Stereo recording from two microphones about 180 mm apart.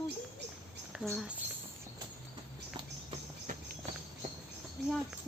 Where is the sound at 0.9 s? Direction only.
5° right (ahead or behind).